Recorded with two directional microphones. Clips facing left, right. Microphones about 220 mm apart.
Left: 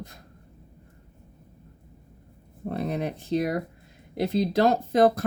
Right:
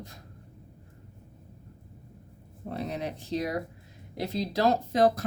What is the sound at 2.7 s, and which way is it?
Speech, 55° left (ahead or behind).